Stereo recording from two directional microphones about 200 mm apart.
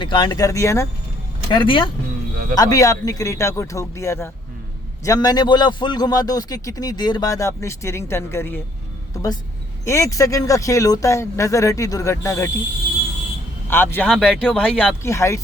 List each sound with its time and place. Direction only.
0.0 s a man's voice: 25° left (ahead or behind)
1.5 s a man's voice: 25° left (ahead or behind)
13.7 s a man's voice: 10° left (ahead or behind)